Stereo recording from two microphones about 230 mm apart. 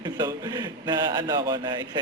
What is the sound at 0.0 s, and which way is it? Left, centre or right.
Speech, centre.